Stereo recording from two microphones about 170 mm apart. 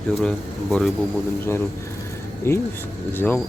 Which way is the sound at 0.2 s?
Centre (ahead or behind).